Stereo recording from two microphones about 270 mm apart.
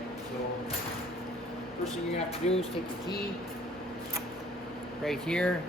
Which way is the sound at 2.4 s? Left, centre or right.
Left.